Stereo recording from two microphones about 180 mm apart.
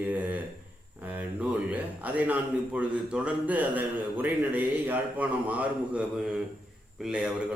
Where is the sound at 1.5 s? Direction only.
10° right (ahead or behind).